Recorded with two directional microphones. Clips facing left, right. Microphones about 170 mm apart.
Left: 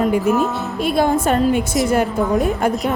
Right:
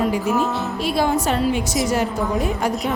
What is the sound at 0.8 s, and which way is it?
A woman's voice, 50° left (ahead or behind).